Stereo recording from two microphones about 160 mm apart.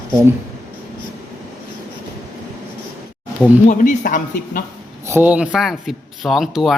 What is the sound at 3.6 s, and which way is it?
Speech, 55° left (ahead or behind).